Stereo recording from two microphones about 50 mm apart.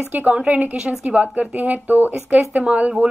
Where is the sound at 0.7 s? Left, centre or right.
Centre.